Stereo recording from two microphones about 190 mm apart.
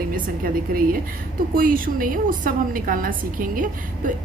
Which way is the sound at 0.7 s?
50° right (ahead or behind).